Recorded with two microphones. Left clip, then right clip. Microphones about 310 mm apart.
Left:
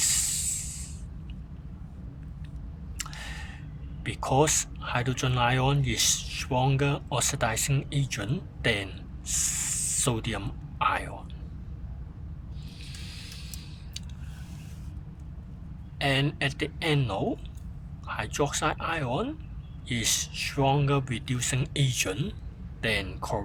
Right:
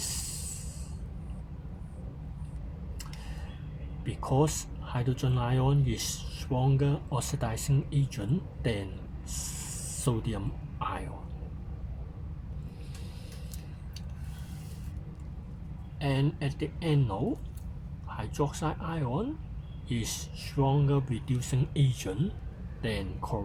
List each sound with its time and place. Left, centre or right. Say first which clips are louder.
0.0 s spray: left 10 dB; left
4.0 s speech: left 5 dB; left
16.0 s speech: left 6 dB; left